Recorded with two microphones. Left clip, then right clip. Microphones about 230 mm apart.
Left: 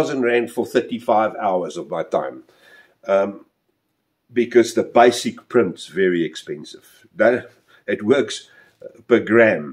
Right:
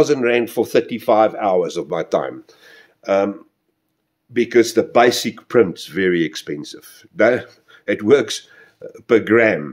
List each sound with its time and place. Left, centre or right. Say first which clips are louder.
0.0 s speech: right 3 dB; right
4.3 s speech: right 1 dB; right